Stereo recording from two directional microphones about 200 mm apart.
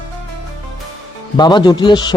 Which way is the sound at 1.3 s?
20° left (ahead or behind).